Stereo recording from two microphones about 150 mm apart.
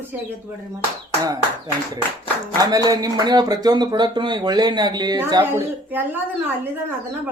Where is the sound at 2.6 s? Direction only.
25° right (ahead or behind).